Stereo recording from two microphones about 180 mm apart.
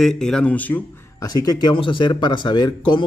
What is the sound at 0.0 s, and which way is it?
Speech, 5° left (ahead or behind).